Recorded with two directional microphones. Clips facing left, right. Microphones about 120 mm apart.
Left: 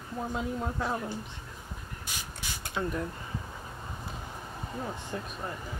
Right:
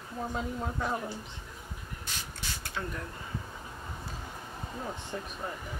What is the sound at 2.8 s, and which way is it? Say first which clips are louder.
Speech: left 5 dB; 20° left (ahead or behind).